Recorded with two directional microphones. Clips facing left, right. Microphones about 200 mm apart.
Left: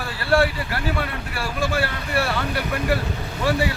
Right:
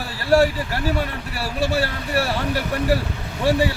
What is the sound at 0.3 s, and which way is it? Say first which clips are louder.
A man's voice: right 3 dB; 40° right (ahead or behind).